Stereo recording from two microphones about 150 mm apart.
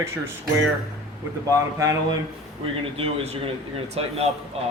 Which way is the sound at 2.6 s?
40° right (ahead or behind).